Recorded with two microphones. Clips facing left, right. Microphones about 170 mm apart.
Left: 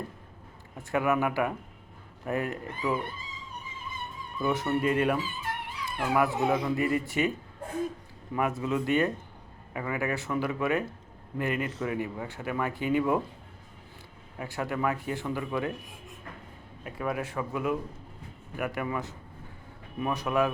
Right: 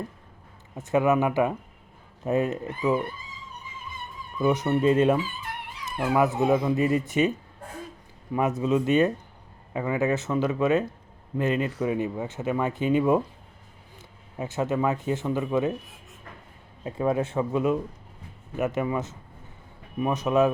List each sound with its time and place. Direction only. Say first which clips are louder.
0.8 s speech: right 5 dB; 20° right (ahead or behind)
4.4 s speech: right 5 dB; 20° right (ahead or behind)
14.3 s speech: right 6 dB; 20° right (ahead or behind)
16.8 s speech: right 7 dB; 25° right (ahead or behind)